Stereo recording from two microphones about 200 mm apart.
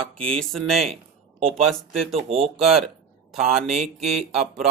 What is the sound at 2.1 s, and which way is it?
Speech, 30° right (ahead or behind).